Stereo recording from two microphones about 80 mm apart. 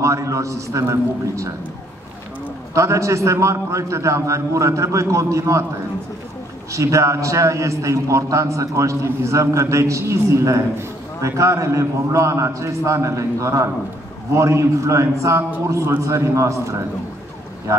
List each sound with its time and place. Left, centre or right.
0.0 s a man's voice: right
2.7 s a man's voice: right
6.7 s a man's voice: right